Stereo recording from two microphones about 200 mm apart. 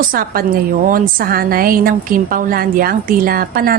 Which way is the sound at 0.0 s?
45° right (ahead or behind).